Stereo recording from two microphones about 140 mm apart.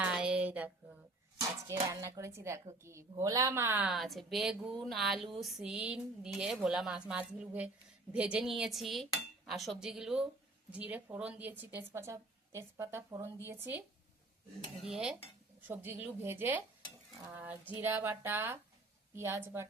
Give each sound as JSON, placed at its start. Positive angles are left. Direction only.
{"t": 0.0, "sound": "a sound", "side_deg": -5}
{"t": 1.4, "sound": "speech", "side_deg": -25}
{"t": 3.9, "sound": "a woman's voice", "side_deg": 0}
{"t": 14.8, "sound": "a woman's voice", "side_deg": -5}